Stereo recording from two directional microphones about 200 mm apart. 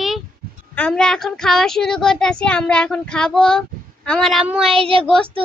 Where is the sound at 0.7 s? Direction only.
5° left (ahead or behind).